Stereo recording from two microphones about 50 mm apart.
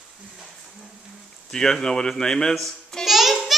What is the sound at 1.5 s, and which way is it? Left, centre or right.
A child's voice, centre.